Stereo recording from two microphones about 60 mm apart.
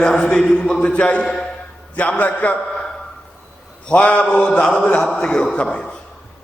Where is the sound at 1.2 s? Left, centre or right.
Centre.